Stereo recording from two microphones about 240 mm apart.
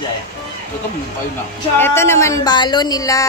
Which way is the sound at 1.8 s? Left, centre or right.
Centre.